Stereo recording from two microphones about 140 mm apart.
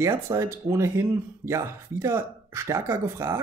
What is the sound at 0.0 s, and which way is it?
Speech, 20° right (ahead or behind).